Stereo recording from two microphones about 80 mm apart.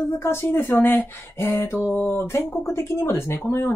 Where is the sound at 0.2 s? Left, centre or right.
Left.